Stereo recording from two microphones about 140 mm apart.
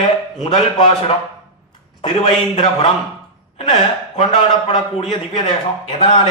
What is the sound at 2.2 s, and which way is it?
A man's voice, 50° left (ahead or behind).